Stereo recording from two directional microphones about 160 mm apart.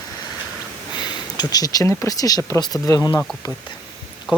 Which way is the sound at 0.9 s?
25° left (ahead or behind).